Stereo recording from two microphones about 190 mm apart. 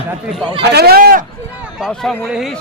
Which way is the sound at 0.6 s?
60° right (ahead or behind).